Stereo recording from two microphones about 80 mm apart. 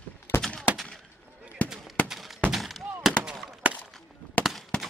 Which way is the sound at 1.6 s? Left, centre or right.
Left.